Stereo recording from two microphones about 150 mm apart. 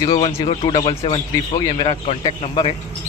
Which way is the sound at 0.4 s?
40° left (ahead or behind).